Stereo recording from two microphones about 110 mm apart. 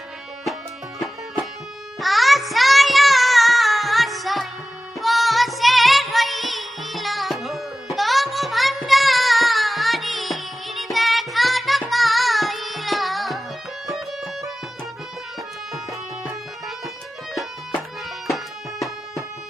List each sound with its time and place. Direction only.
0.9 s music: centre (ahead or behind)